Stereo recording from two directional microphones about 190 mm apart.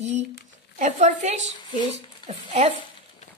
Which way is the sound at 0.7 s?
40° right (ahead or behind).